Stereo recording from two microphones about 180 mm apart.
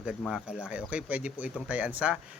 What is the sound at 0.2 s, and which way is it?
Speech, centre (ahead or behind).